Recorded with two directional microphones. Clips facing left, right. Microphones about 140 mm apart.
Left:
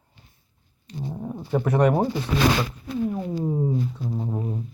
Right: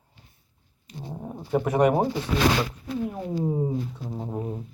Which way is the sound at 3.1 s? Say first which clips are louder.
Left 1 dB; 10° right (ahead or behind).